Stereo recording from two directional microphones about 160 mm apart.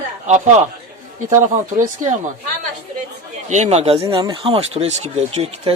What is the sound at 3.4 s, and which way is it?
Speech, 45° right (ahead or behind).